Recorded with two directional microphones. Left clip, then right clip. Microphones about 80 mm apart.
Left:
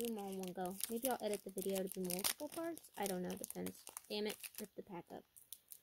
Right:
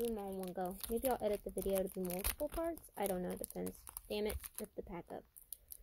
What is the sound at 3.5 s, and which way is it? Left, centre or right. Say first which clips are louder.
Speech: right 3 dB; left.